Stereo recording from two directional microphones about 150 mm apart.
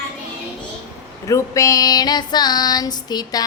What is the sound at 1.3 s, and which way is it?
Female singing, 20° left (ahead or behind).